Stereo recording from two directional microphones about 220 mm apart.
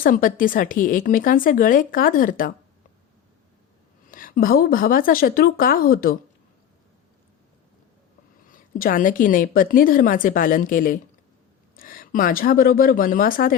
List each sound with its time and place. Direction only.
0.0 s a woman's voice: 40° left (ahead or behind)
4.1 s a woman's voice: 40° left (ahead or behind)
8.4 s a woman's voice: 40° left (ahead or behind)